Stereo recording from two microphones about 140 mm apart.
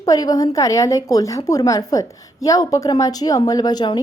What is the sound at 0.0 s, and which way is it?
A woman's voice, 25° left (ahead or behind).